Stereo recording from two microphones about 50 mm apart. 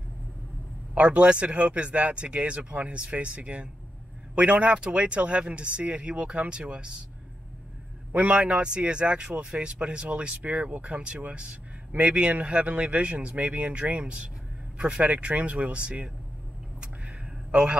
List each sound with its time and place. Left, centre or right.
0.9 s speech: right
8.1 s speech: right
16.8 s a sound: right